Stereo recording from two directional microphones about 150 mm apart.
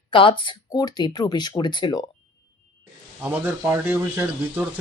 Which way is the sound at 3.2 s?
15° right (ahead or behind).